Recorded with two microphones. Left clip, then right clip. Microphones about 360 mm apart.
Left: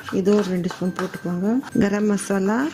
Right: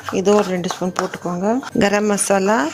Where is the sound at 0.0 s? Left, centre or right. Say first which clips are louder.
Right 5 dB; centre.